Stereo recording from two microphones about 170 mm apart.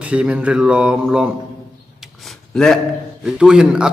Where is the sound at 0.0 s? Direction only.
5° right (ahead or behind).